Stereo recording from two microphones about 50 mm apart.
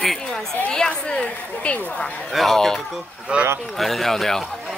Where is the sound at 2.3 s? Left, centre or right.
Centre.